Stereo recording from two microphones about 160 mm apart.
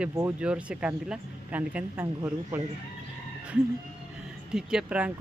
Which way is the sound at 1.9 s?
20° right (ahead or behind).